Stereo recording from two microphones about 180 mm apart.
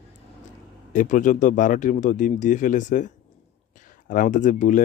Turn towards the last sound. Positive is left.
turn(degrees=45)  # may be behind; listen again after turning